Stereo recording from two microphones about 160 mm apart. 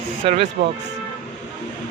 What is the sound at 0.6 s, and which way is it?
Speech, 60° right (ahead or behind).